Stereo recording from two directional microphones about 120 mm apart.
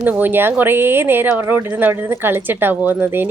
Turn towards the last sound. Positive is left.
turn(degrees=-15)  # may be behind; listen again after turning